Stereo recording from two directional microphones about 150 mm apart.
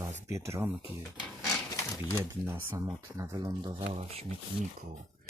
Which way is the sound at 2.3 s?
15° right (ahead or behind).